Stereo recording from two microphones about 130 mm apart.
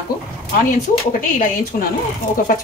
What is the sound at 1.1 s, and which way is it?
Speech, 90° left.